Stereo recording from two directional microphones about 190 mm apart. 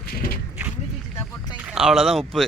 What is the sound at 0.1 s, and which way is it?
Horse, 50° left (ahead or behind).